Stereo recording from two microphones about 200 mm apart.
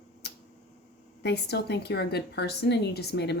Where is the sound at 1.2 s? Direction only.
55° left (ahead or behind).